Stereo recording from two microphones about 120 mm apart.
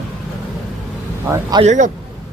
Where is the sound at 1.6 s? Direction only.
90° right.